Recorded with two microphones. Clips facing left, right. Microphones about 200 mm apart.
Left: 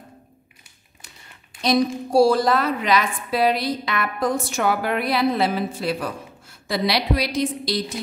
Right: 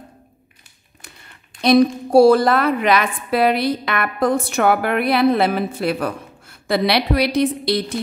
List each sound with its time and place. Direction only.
1.6 s a woman's voice: 60° right (ahead or behind)